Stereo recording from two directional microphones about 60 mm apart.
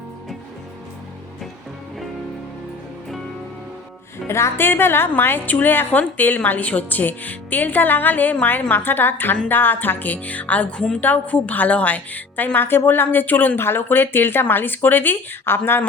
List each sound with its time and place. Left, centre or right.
4.3 s a woman's voice: left